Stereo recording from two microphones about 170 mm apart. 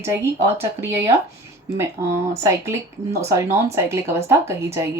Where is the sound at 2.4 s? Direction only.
15° right (ahead or behind).